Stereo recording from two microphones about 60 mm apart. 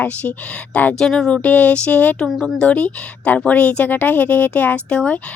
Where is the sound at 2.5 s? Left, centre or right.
Centre.